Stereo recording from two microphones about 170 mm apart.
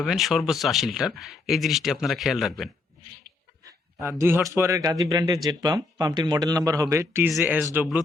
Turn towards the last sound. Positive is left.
turn(degrees=-10)  # may be behind; listen again after turning